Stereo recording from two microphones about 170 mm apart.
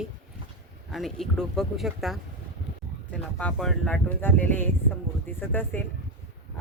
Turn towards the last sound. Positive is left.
turn(degrees=10)  # may be behind; listen again after turning